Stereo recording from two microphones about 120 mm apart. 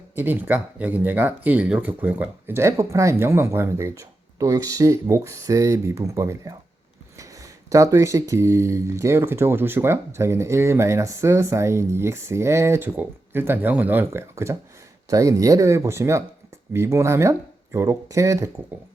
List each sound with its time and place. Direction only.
0.2 s speech: 15° right (ahead or behind)